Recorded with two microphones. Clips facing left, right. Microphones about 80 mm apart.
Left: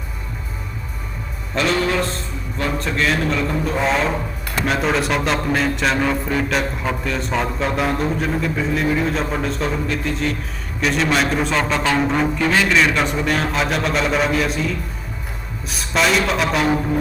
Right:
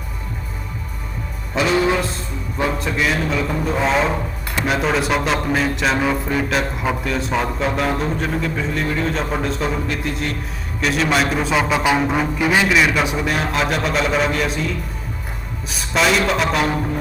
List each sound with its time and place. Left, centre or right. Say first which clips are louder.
1.5 s music: right 2 dB; centre
2.8 s speech: even; centre
15.7 s speech: even; centre